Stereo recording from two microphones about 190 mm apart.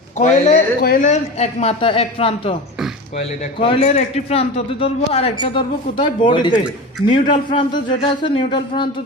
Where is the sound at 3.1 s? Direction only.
30° left (ahead or behind).